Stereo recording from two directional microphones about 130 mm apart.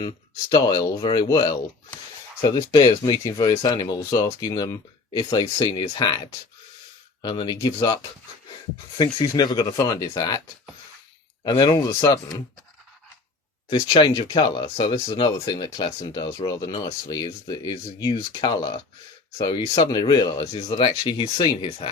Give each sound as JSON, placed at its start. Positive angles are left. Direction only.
{"t": 0.5, "sound": "speech", "side_deg": 30}
{"t": 9.0, "sound": "speech", "side_deg": 35}
{"t": 11.4, "sound": "speech", "side_deg": 35}
{"t": 11.7, "sound": "speech", "side_deg": 20}
{"t": 14.1, "sound": "speech", "side_deg": 30}